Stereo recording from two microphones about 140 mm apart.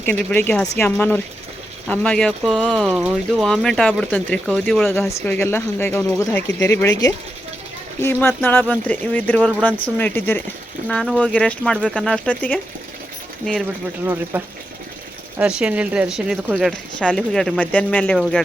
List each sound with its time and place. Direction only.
0.0 s speech: 10° left (ahead or behind); by 3.4 s 5° right (ahead or behind)
3.4 s speech: 5° left (ahead or behind)
4.9 s speech: 15° left (ahead or behind)
8.3 s speech: 10° left (ahead or behind)
10.8 s speech: 5° left (ahead or behind)
14.0 s speech: 15° right (ahead or behind); by 18.4 s 5° left (ahead or behind)